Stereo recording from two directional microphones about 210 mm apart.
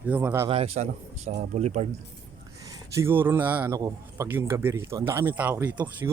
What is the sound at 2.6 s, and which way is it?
A man's voice, 15° right (ahead or behind).